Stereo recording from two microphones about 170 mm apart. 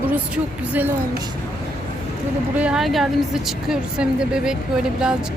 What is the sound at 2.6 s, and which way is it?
A woman's voice, 5° right (ahead or behind).